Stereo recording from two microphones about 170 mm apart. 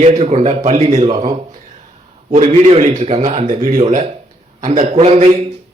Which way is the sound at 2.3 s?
40° right (ahead or behind).